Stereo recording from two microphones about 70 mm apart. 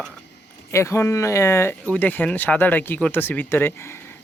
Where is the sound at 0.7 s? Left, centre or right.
Left.